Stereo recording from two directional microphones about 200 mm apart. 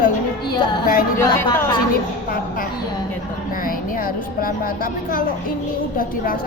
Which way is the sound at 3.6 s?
45° left (ahead or behind).